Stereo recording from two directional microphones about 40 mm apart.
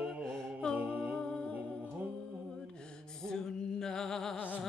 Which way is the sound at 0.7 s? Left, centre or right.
Right.